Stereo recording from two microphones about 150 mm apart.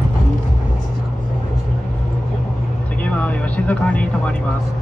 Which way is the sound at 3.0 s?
10° left (ahead or behind).